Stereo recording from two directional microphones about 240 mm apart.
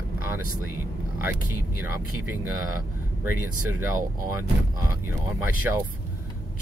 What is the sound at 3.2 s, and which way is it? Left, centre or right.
Speech, centre.